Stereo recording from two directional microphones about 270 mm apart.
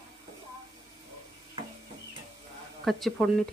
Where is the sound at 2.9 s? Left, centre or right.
Centre.